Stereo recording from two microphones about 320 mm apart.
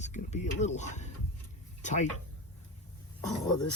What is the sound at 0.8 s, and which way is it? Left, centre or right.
Speech, left.